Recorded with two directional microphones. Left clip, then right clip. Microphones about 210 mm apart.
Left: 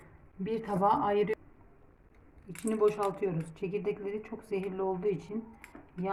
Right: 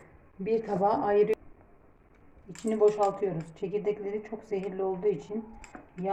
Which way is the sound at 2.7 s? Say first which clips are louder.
Right 4 dB; 35° left (ahead or behind).